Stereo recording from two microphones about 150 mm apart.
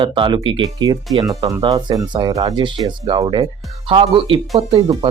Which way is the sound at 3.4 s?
40° right (ahead or behind).